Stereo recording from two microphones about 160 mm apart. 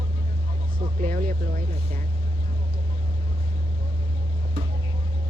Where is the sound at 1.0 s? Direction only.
60° right (ahead or behind).